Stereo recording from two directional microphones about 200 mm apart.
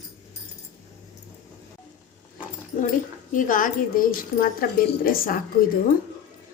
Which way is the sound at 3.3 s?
40° left (ahead or behind).